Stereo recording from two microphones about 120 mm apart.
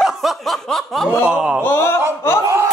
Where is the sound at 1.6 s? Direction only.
20° left (ahead or behind).